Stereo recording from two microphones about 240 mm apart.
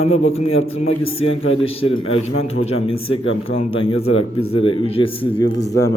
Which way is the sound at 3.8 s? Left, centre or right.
Left.